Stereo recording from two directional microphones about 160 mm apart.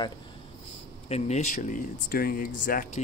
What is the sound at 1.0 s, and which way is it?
Speech, 40° left (ahead or behind).